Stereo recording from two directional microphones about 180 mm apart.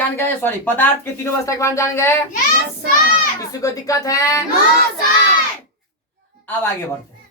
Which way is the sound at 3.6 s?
20° left (ahead or behind).